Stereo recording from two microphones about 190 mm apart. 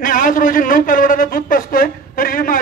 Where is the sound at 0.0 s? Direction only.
45° left (ahead or behind).